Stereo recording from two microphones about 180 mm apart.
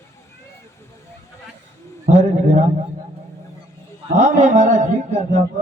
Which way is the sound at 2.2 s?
40° right (ahead or behind).